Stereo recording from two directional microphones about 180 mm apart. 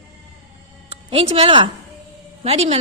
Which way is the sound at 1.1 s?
35° right (ahead or behind).